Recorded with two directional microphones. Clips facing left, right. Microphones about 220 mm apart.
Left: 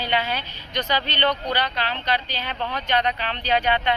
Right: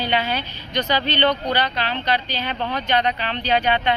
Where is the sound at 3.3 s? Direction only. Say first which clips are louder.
Right 2 dB; 5° left (ahead or behind).